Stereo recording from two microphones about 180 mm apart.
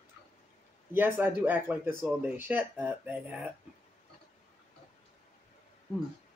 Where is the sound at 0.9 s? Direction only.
10° right (ahead or behind).